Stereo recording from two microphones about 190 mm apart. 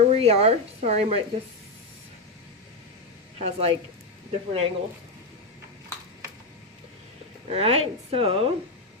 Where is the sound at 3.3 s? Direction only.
30° right (ahead or behind).